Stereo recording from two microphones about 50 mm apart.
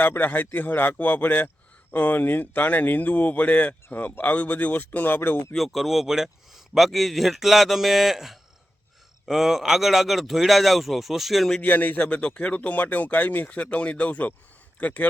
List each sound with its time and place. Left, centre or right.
0.0 s speech: left
5.5 s speech: centre
11.6 s speech: left
13.5 s speech: left